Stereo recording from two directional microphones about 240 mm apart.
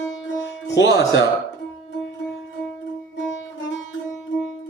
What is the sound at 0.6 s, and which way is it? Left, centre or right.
Speech, left.